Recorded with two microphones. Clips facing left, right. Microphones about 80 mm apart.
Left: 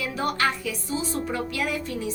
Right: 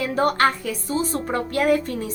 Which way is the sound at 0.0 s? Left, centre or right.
Right.